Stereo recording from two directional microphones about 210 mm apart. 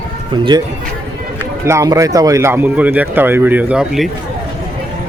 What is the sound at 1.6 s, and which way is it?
Speech, 15° right (ahead or behind).